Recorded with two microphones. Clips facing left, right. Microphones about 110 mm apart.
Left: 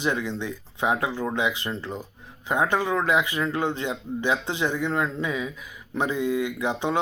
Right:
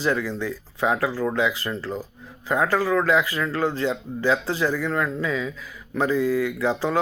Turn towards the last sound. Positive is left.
turn(degrees=20)  # may be behind; listen again after turning